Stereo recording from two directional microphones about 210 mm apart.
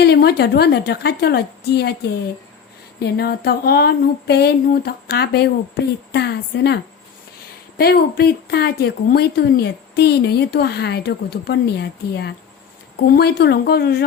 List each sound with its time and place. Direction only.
0.0 s speech: 50° left (ahead or behind)
3.0 s speech: 50° left (ahead or behind)
7.8 s speech: 45° left (ahead or behind)